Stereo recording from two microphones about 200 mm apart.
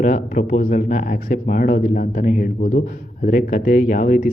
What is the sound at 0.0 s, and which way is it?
Speech, 40° left (ahead or behind).